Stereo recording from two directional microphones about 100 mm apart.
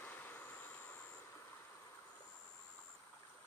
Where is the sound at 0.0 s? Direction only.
20° left (ahead or behind).